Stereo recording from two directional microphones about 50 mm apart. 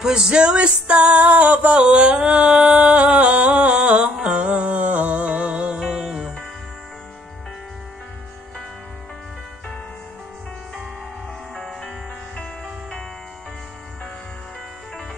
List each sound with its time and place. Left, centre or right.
0.0 s music: centre
5.8 s music: centre
11.5 s music: centre